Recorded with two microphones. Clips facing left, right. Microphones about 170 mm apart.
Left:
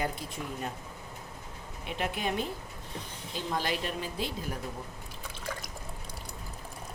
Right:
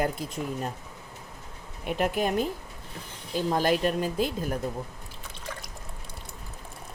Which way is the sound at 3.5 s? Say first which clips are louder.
Right 8 dB; 45° right (ahead or behind).